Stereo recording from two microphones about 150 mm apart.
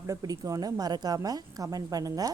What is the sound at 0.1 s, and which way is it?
Speech, 25° right (ahead or behind).